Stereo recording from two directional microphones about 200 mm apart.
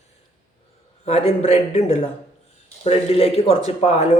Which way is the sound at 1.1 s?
30° left (ahead or behind).